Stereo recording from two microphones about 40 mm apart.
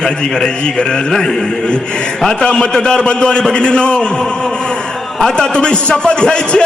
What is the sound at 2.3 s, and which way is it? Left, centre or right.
A man's voice, left.